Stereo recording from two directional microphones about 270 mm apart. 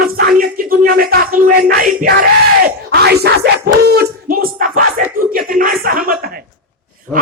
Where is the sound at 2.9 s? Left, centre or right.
Right.